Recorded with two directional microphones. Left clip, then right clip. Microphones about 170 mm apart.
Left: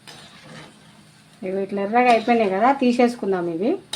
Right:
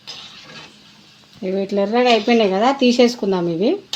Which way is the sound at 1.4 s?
65° right (ahead or behind).